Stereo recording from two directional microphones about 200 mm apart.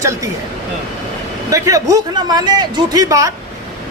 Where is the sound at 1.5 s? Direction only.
15° right (ahead or behind).